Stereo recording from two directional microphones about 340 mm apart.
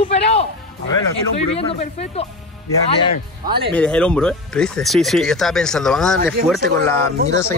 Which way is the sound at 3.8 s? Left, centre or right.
Centre.